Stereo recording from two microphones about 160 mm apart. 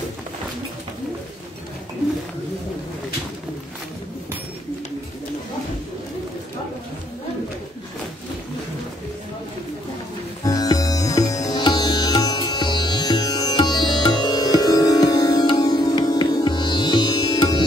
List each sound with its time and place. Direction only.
10.4 s sitar: 25° left (ahead or behind)